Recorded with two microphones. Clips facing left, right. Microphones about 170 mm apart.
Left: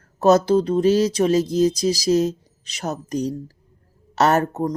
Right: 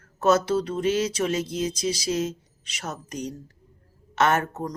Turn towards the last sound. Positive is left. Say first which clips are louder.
# left 5 dB
turn(degrees=35)  # may be behind; listen again after turning